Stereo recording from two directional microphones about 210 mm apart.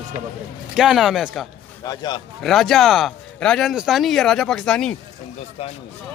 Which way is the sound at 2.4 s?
Centre (ahead or behind).